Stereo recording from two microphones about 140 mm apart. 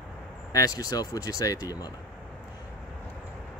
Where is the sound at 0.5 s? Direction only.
25° left (ahead or behind).